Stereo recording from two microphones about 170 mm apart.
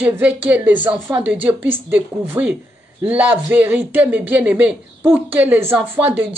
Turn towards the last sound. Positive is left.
turn(degrees=-10)  # may be behind; listen again after turning